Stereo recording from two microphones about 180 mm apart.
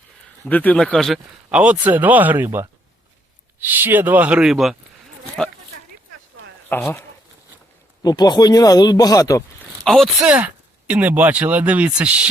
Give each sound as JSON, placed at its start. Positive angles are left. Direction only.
{"t": 0.4, "sound": "speech", "side_deg": 10}
{"t": 6.7, "sound": "speech", "side_deg": 10}
{"t": 8.0, "sound": "speech", "side_deg": 25}
{"t": 9.8, "sound": "speech", "side_deg": 0}